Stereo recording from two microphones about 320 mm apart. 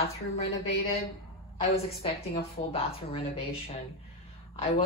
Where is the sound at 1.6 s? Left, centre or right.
Centre.